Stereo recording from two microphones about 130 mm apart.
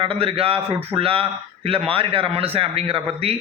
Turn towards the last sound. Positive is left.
turn(degrees=-45)  # may be behind; listen again after turning